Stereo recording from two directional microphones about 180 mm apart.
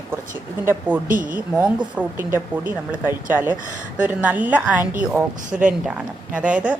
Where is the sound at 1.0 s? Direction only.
50° right (ahead or behind).